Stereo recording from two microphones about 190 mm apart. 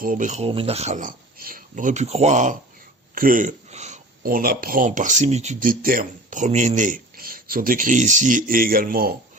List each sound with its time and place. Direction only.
0.0 s speech: 45° right (ahead or behind)